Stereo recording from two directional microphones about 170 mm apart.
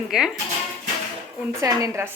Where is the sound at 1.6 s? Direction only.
20° right (ahead or behind).